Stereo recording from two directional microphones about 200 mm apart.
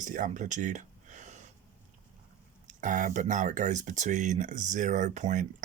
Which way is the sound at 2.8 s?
40° right (ahead or behind).